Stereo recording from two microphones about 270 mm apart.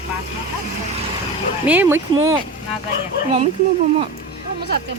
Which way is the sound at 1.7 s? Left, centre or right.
Centre.